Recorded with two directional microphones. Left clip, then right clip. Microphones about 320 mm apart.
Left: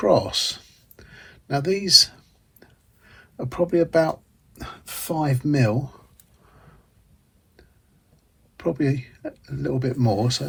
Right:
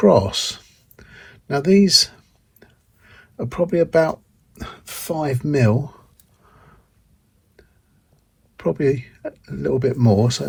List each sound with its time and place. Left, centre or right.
0.0 s a sound: centre
3.5 s speech: centre
8.5 s speech: centre